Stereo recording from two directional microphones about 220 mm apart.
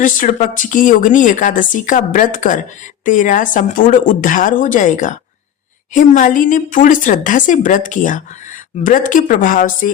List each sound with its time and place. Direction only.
0.0 s speech: 35° left (ahead or behind)